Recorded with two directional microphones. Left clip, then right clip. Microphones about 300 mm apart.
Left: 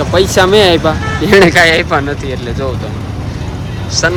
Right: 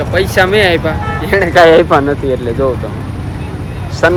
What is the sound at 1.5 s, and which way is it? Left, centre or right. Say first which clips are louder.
Speech: right 3 dB; centre.